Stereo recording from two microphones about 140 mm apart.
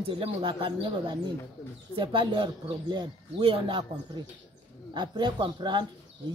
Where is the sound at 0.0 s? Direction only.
40° right (ahead or behind).